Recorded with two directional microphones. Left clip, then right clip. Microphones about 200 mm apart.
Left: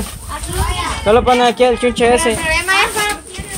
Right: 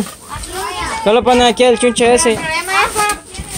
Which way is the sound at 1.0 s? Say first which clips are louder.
Right 1 dB; 30° right (ahead or behind).